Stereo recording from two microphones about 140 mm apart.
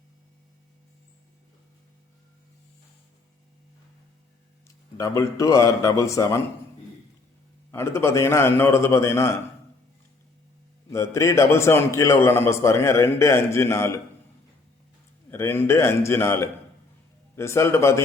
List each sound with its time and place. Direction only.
4.9 s a man's voice: 25° left (ahead or behind)
7.7 s a man's voice: 20° left (ahead or behind)
10.8 s a man's voice: 20° left (ahead or behind)
15.3 s a man's voice: 15° left (ahead or behind)